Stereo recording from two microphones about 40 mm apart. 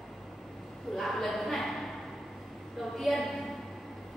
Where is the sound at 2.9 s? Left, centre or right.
Centre.